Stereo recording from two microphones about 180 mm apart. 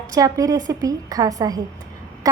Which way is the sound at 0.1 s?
20° right (ahead or behind).